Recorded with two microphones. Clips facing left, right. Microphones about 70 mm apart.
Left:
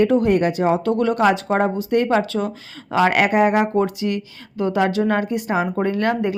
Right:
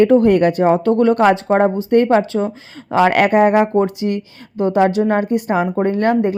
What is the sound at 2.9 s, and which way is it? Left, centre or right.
Speech, right.